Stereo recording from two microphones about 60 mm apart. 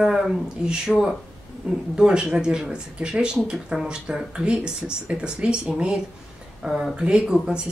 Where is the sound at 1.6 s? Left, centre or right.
Centre.